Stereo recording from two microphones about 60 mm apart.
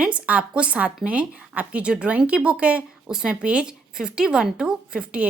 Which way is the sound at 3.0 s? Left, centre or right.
Centre.